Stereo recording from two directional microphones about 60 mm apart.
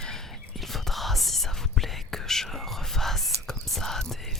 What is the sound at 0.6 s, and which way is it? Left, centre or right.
Whispering, centre.